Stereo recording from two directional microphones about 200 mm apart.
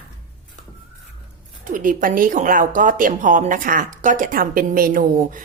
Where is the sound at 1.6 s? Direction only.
40° right (ahead or behind).